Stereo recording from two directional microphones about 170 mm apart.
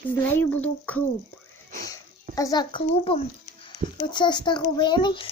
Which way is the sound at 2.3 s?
20° left (ahead or behind).